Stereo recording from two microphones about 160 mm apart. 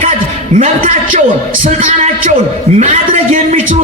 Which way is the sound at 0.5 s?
55° right (ahead or behind).